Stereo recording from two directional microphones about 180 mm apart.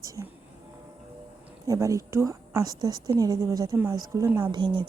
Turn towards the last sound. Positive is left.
turn(degrees=-25)  # may be behind; listen again after turning